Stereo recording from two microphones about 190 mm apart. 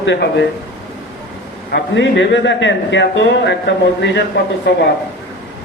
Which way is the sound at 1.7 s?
70° left (ahead or behind).